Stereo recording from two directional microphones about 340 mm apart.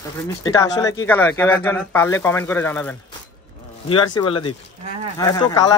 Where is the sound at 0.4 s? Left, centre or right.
Centre.